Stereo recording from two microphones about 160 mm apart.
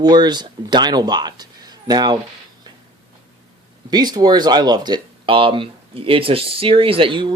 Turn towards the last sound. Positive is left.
turn(degrees=-30)  # may be behind; listen again after turning